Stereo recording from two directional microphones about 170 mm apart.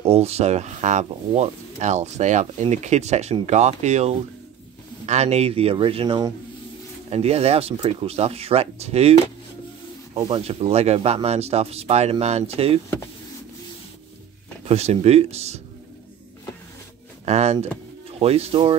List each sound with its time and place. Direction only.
0.0 s speech: 35° right (ahead or behind)
7.1 s speech: 35° right (ahead or behind)
10.1 s speech: 35° right (ahead or behind)
14.7 s speech: 40° right (ahead or behind)
17.2 s speech: 40° right (ahead or behind)